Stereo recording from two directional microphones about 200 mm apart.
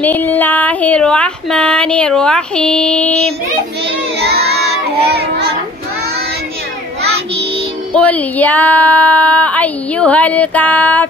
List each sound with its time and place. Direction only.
0.0 s speech: 10° left (ahead or behind)
4.2 s child singing: 55° right (ahead or behind)
7.9 s speech: 5° left (ahead or behind)